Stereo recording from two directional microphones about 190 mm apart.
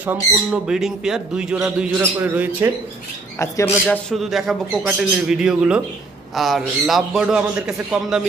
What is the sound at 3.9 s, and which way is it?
Speech, centre (ahead or behind).